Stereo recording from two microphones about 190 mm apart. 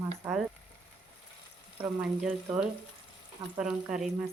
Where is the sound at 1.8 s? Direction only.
5° right (ahead or behind).